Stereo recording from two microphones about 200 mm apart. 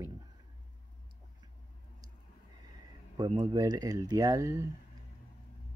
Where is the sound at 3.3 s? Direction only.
20° right (ahead or behind).